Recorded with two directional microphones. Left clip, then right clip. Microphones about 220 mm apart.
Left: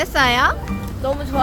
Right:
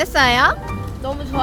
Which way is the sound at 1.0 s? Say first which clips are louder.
Left 3 dB; 10° left (ahead or behind).